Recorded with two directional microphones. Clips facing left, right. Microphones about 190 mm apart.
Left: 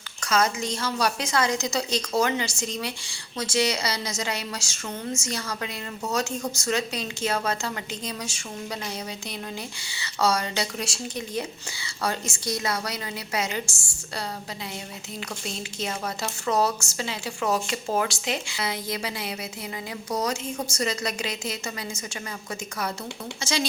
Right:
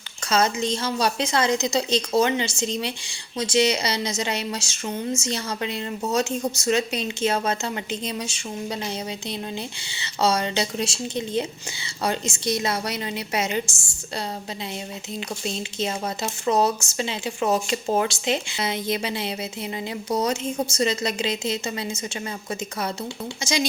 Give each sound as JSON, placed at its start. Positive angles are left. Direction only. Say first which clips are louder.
{"t": 0.2, "sound": "a woman's voice", "louder": "right 2 dB", "side_deg": -25}
{"t": 15.4, "sound": "a woman's voice", "louder": "right 5 dB", "side_deg": -20}